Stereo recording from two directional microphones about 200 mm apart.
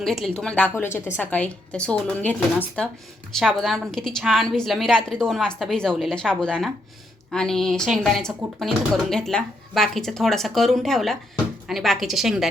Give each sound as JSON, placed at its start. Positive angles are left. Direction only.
{"t": 0.0, "sound": "speech", "side_deg": 0}